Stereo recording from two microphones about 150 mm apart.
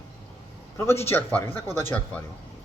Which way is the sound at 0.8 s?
15° left (ahead or behind).